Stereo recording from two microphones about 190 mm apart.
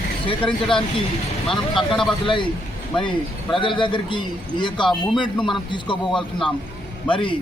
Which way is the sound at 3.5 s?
25° left (ahead or behind).